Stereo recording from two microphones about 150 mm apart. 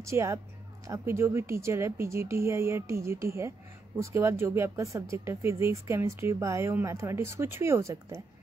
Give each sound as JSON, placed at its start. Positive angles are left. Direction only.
{"t": 0.0, "sound": "speech", "side_deg": -20}